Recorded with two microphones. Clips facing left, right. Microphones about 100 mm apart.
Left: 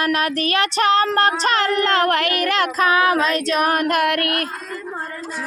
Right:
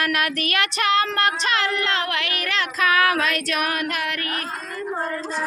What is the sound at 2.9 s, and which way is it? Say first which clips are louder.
Female singing: left 1 dB; 25° left (ahead or behind).